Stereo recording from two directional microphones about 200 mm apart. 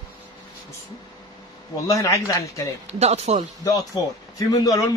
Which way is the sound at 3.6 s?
15° left (ahead or behind).